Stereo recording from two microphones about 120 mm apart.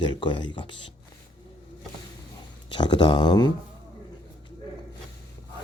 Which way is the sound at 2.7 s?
40° left (ahead or behind).